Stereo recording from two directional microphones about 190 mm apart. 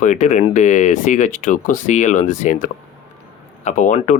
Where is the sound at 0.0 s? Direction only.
40° left (ahead or behind).